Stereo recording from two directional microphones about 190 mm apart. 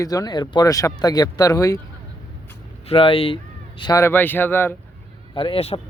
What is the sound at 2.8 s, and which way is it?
Speech, 30° left (ahead or behind).